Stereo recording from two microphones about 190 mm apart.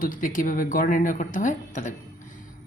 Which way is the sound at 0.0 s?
45° left (ahead or behind).